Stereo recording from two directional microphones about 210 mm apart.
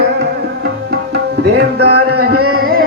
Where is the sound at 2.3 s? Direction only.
90° right.